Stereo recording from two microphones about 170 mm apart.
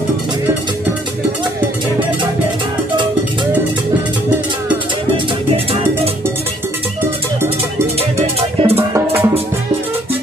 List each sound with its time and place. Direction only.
8.4 s music: 35° right (ahead or behind)
8.9 s music: 10° right (ahead or behind)